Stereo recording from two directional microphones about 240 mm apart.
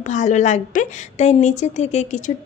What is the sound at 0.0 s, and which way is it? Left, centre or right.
A woman's voice, left.